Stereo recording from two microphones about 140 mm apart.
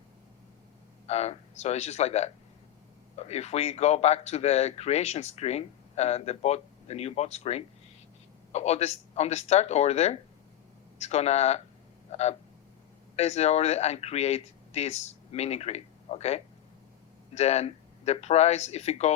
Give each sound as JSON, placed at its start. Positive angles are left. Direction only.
{"t": 1.0, "sound": "speech", "side_deg": 50}